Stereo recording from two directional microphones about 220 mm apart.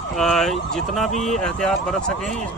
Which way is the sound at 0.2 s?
Centre (ahead or behind).